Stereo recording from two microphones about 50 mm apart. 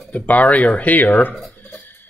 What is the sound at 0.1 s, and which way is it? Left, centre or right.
A man's voice, left.